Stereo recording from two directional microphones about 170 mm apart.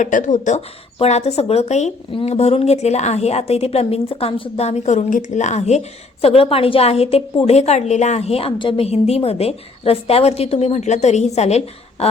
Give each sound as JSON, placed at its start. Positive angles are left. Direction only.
{"t": 0.0, "sound": "speech", "side_deg": 45}